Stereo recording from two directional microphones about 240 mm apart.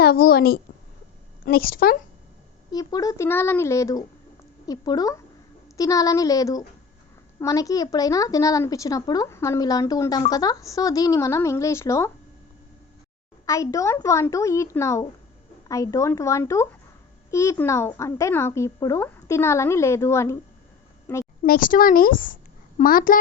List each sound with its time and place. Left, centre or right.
0.0 s a woman's voice: left
2.7 s a woman's voice: centre
13.4 s a woman's voice: centre
21.4 s a woman's voice: left